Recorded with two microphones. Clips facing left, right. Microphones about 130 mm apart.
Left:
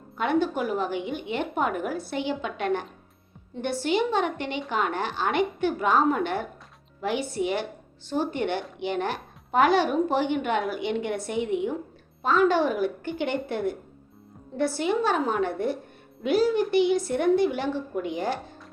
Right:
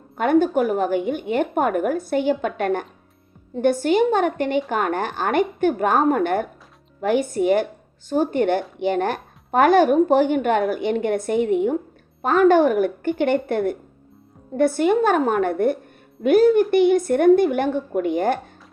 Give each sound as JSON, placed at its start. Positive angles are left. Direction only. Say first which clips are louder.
{"t": 0.2, "sound": "a woman's voice", "louder": "right 7 dB", "side_deg": -50}